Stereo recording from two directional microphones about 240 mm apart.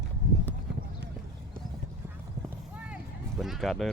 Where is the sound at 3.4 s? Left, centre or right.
Centre.